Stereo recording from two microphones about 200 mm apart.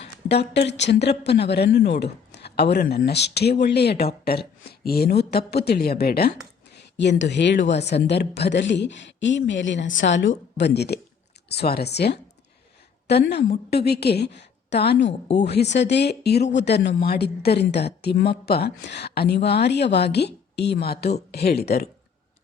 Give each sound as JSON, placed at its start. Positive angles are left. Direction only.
{"t": 0.3, "sound": "a woman's voice", "side_deg": 60}